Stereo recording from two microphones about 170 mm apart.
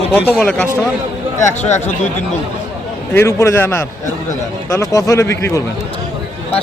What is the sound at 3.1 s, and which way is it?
Speech, 15° left (ahead or behind).